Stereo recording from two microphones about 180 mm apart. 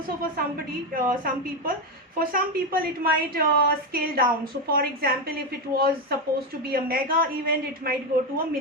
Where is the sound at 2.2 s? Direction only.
55° right (ahead or behind).